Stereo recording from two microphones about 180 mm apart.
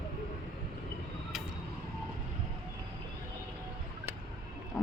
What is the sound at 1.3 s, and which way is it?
Vehicle, centre (ahead or behind).